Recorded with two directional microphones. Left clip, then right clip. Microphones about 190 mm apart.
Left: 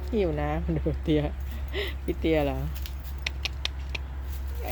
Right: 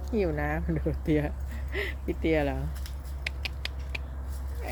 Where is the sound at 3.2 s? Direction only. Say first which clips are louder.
Left 3 dB; 20° left (ahead or behind).